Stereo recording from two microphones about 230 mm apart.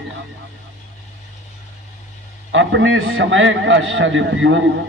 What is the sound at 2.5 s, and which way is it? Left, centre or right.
A man's voice, right.